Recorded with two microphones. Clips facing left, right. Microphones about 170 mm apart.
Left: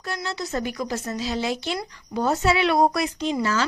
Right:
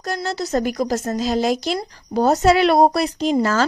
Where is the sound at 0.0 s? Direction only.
40° right (ahead or behind).